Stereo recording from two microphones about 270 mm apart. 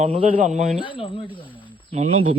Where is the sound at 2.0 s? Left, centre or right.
Right.